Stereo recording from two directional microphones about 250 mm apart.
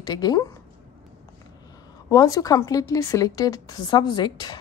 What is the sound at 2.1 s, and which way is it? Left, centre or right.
Speech, centre.